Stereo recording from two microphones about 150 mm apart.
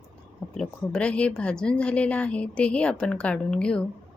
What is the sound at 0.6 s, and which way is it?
A woman's voice, 5° left (ahead or behind).